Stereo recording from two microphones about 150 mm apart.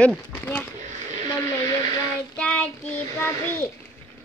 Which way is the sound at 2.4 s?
10° left (ahead or behind).